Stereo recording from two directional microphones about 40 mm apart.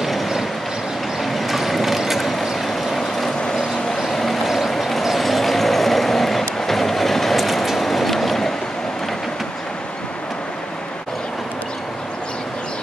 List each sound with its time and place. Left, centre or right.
0.0 s a sound: centre
1.2 s mechanisms: centre
2.6 s vehicle: centre